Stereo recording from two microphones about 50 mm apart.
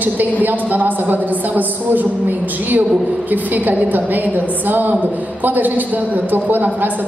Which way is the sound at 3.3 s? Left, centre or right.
Right.